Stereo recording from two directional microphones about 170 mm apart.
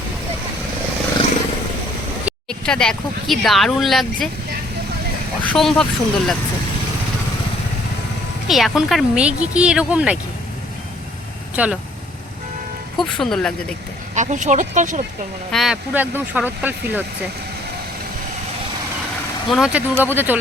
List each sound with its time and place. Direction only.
2.5 s speech: 5° left (ahead or behind)
5.4 s speech: 5° left (ahead or behind)
8.4 s speech: centre (ahead or behind)
11.5 s speech: 5° right (ahead or behind)
13.0 s speech: 5° left (ahead or behind)
14.2 s speech: 45° right (ahead or behind)
15.5 s speech: 5° right (ahead or behind)
19.5 s speech: centre (ahead or behind)